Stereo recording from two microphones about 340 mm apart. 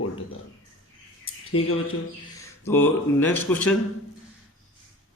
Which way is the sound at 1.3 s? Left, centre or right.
Left.